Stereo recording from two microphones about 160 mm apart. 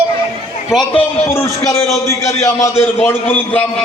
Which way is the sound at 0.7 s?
Centre (ahead or behind).